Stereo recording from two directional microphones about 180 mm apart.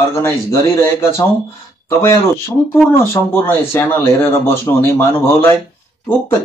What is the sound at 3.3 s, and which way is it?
Speech, 15° left (ahead or behind).